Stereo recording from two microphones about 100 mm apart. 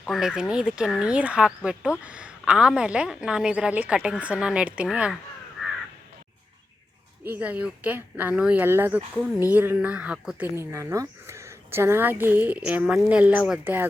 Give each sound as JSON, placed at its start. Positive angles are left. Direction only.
{"t": 0.0, "sound": "a woman's voice", "side_deg": -5}
{"t": 7.3, "sound": "a woman's voice", "side_deg": -15}
{"t": 8.6, "sound": "a woman's voice", "side_deg": -25}
{"t": 10.5, "sound": "speech", "side_deg": -30}